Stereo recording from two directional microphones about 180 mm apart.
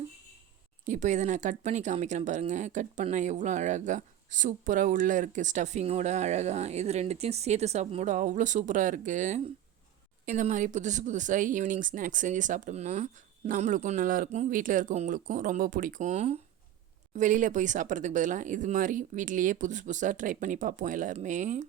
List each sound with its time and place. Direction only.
0.9 s speech: 40° right (ahead or behind)